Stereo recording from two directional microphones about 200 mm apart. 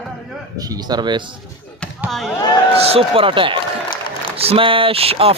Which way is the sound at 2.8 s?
30° right (ahead or behind).